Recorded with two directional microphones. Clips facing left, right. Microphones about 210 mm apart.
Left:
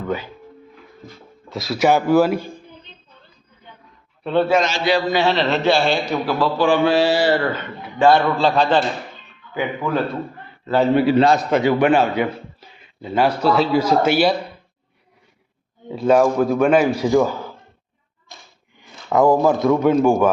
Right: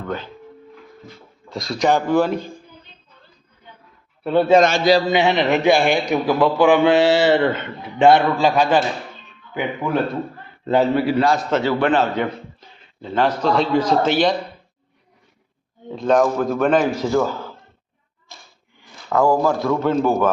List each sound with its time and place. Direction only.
0.0 s speech: 10° left (ahead or behind)
1.5 s a man's voice: 5° left (ahead or behind)
4.2 s a man's voice: 10° right (ahead or behind)
4.6 s a man's voice: 55° right (ahead or behind)
5.1 s a man's voice: 15° right (ahead or behind)
10.9 s a man's voice: 25° left (ahead or behind)
15.9 s a man's voice: 5° left (ahead or behind)
18.8 s a man's voice: 20° left (ahead or behind)